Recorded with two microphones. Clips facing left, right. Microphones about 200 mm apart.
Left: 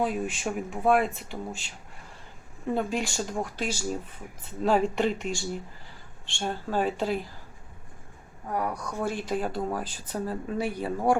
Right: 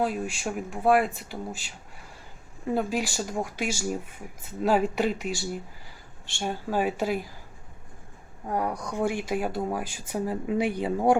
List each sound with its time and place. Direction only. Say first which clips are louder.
0.0 s speech: even; centre (ahead or behind)
2.6 s speech: right 1 dB; 5° right (ahead or behind)
8.8 s speech: right 3 dB; 15° right (ahead or behind)